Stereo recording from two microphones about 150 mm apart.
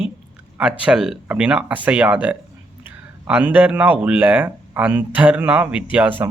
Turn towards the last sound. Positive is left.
turn(degrees=-10)  # may be behind; listen again after turning